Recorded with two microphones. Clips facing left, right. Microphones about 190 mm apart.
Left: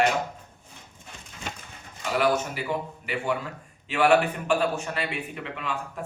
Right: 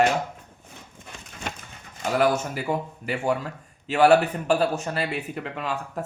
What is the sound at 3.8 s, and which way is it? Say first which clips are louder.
Speech: right 3 dB; 40° right (ahead or behind).